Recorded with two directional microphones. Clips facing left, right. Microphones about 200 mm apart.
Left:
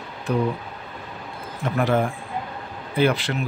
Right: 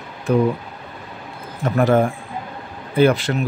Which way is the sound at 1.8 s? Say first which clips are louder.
Right 5 dB; 45° right (ahead or behind).